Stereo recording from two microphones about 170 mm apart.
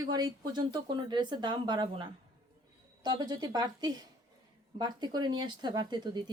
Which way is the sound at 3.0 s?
25° right (ahead or behind).